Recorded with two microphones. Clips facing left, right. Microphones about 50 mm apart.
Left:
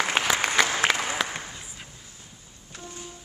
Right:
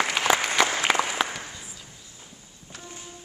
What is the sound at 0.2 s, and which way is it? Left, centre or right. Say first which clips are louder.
Applause: right 2 dB; left.